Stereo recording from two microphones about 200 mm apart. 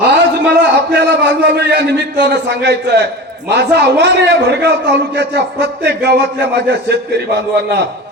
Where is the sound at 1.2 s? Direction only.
60° right (ahead or behind).